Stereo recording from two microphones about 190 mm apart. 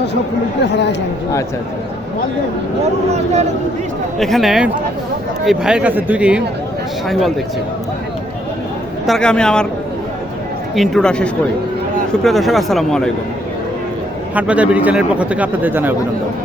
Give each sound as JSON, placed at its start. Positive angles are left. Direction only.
{"t": 0.6, "sound": "speech", "side_deg": 65}
{"t": 4.2, "sound": "a man's voice", "side_deg": 0}
{"t": 9.0, "sound": "a man's voice", "side_deg": 5}
{"t": 10.8, "sound": "a man's voice", "side_deg": 5}
{"t": 14.3, "sound": "speech", "side_deg": -5}